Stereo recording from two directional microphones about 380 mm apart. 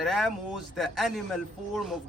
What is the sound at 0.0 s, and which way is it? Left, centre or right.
Speech, centre.